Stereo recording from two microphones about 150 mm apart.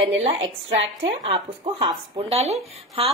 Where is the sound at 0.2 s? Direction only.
40° right (ahead or behind).